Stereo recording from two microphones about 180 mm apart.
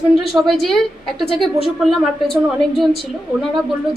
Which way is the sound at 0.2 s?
Centre (ahead or behind).